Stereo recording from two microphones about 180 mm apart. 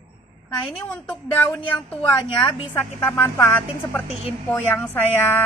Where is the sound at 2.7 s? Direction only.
10° left (ahead or behind).